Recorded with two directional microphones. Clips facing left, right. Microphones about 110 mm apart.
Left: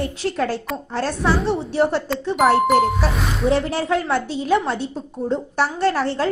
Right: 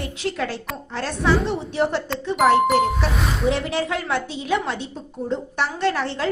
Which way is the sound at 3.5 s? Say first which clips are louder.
Left 4 dB; 35° left (ahead or behind).